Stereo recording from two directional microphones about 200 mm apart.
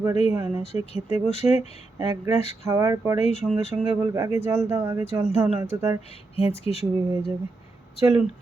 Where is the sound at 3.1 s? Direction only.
35° left (ahead or behind).